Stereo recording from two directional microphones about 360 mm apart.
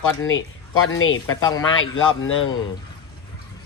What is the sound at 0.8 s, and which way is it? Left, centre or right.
A man's voice, left.